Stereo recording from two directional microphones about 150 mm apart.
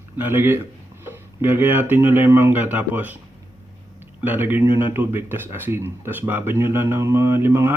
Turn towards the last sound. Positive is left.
turn(degrees=-15)  # may be behind; listen again after turning